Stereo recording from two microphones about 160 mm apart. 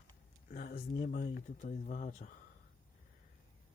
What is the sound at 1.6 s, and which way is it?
Speech, 50° left (ahead or behind).